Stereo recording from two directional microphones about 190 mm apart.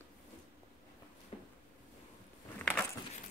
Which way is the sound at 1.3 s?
30° left (ahead or behind).